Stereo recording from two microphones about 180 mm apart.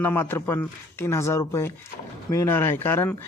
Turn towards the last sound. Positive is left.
turn(degrees=10)  # may be behind; listen again after turning